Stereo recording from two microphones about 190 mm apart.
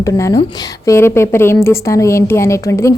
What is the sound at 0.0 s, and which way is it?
A woman's voice, 15° left (ahead or behind).